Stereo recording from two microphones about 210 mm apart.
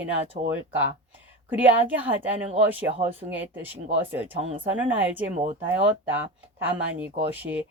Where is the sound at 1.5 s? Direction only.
10° right (ahead or behind).